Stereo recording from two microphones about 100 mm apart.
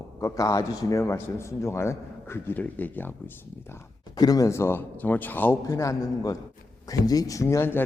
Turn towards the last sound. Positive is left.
turn(degrees=20)  # may be behind; listen again after turning